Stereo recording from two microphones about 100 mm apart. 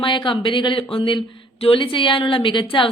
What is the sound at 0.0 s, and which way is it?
A woman's voice, 55° left (ahead or behind).